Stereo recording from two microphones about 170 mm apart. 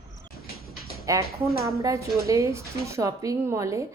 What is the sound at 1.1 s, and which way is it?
A woman's voice, 20° right (ahead or behind).